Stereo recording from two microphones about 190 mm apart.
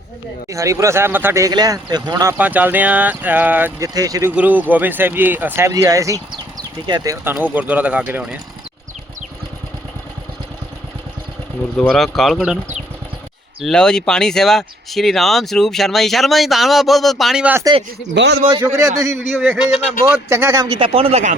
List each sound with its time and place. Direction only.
0.5 s speech: 15° right (ahead or behind)
2.4 s a man's voice: 10° right (ahead or behind)
11.8 s speech: 5° left (ahead or behind)
13.6 s speech: 5° left (ahead or behind)
17.6 s a man's voice: 20° right (ahead or behind)
18.1 s speech: 65° right (ahead or behind)
18.3 s a man's voice: 20° right (ahead or behind)
19.2 s speech: 5° left (ahead or behind)
20.1 s a man's voice: 15° right (ahead or behind); by 21.3 s 35° right (ahead or behind)